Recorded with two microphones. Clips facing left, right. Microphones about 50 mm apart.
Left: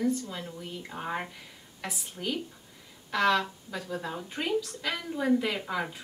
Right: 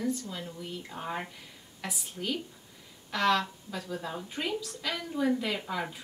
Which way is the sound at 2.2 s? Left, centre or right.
Left.